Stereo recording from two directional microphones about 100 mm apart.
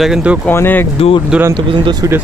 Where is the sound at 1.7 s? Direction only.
45° right (ahead or behind).